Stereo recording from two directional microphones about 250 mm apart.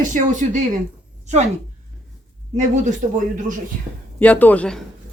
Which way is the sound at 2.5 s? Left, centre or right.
Right.